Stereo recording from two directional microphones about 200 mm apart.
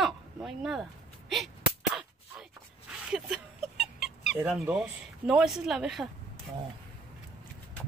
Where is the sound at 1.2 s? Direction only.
Centre (ahead or behind).